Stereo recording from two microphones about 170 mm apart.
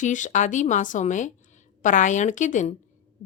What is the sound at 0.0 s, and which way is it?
A woman's voice, 45° left (ahead or behind).